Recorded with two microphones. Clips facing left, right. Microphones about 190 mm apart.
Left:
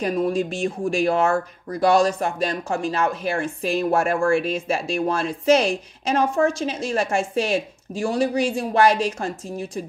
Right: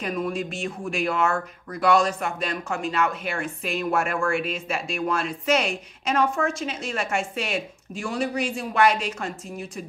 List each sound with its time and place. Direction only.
0.0 s speech: 35° left (ahead or behind)